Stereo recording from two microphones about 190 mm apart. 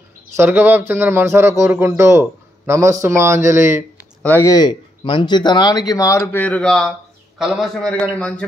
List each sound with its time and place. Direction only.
0.4 s speech: 10° right (ahead or behind)
4.2 s a man's voice: 10° left (ahead or behind)